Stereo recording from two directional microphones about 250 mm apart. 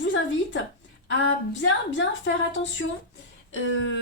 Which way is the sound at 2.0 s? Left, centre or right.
Left.